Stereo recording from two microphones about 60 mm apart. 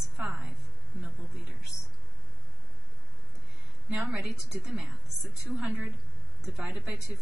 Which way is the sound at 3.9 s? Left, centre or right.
Centre.